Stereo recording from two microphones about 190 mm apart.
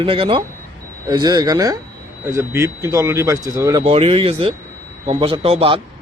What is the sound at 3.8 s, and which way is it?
A man's voice, 30° right (ahead or behind).